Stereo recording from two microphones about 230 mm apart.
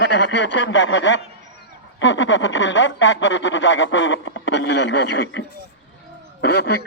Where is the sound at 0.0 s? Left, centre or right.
Left.